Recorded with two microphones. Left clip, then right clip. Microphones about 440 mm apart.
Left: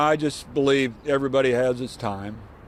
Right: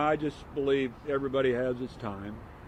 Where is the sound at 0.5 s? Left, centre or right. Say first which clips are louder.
Left 7 dB; left.